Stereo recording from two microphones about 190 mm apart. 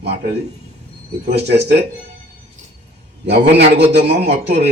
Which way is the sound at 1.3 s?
60° right (ahead or behind).